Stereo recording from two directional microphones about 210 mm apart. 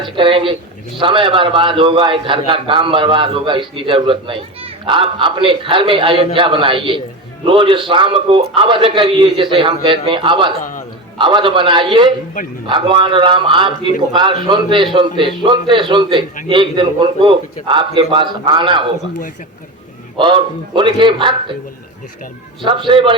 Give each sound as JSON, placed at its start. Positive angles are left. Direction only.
{"t": 0.0, "sound": "a man's voice", "side_deg": -25}
{"t": 10.6, "sound": "a man's voice", "side_deg": 40}
{"t": 11.2, "sound": "a man's voice", "side_deg": -20}
{"t": 20.1, "sound": "a man's voice", "side_deg": -25}
{"t": 22.6, "sound": "a man's voice", "side_deg": -25}